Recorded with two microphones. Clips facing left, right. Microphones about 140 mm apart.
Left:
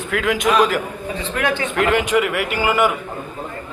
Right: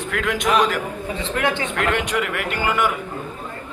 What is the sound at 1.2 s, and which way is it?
Speech, 25° right (ahead or behind).